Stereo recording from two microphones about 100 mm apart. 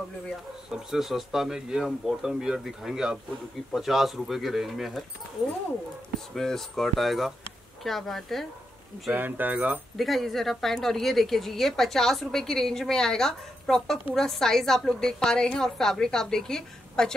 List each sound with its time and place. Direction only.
0.7 s a woman's voice: 5° right (ahead or behind)
6.3 s a woman's voice: 5° left (ahead or behind)
9.1 s speech: 20° right (ahead or behind)
9.9 s a woman's voice: centre (ahead or behind)